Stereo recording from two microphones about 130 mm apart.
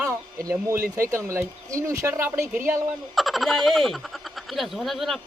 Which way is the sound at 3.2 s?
Centre (ahead or behind).